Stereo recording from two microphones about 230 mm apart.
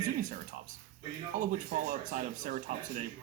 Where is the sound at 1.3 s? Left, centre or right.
Right.